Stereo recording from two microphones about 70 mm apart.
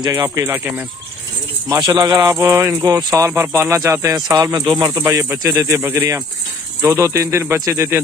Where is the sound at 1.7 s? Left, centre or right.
Right.